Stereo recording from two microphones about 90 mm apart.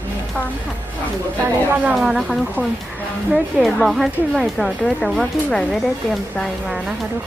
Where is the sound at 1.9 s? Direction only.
5° right (ahead or behind).